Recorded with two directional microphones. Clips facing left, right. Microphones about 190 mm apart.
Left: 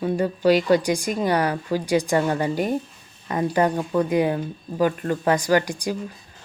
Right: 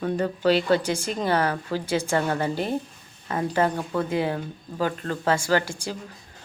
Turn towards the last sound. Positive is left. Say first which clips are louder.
# left 4 dB
turn(degrees=15)  # may be behind; listen again after turning